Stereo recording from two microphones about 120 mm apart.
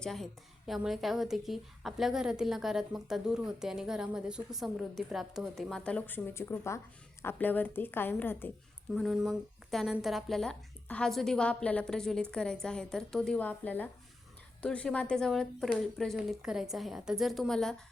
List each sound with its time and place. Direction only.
0.0 s a woman's voice: centre (ahead or behind)
8.9 s a woman's voice: centre (ahead or behind)